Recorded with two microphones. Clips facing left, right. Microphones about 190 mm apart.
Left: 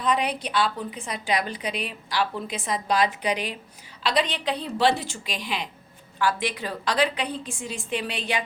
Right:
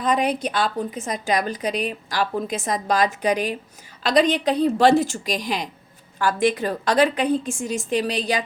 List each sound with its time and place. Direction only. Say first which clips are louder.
0.0 s a woman's voice: right 4 dB; 45° right (ahead or behind)